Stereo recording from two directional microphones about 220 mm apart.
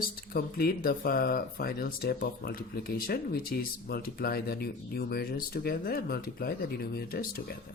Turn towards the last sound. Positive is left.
turn(degrees=45)  # may be behind; listen again after turning